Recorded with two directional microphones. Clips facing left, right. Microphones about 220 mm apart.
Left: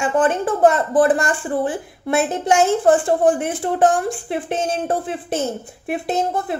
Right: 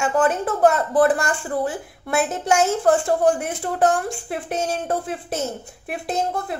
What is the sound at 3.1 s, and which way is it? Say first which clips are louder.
Speech: left 2 dB; centre (ahead or behind).